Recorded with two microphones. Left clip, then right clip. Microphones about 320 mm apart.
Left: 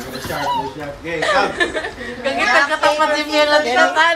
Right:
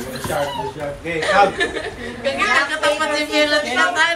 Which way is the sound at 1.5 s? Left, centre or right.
Centre.